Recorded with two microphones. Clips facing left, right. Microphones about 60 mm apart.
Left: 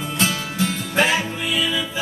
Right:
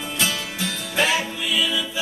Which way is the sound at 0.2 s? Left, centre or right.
Left.